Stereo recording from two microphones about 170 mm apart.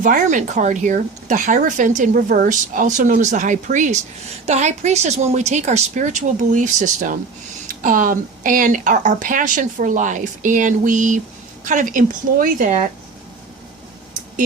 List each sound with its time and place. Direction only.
0.0 s speech: 50° right (ahead or behind)